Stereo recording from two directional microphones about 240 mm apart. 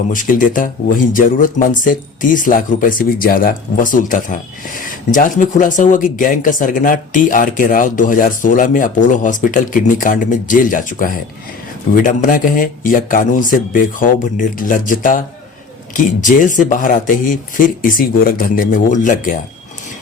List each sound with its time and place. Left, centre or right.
0.1 s speech: left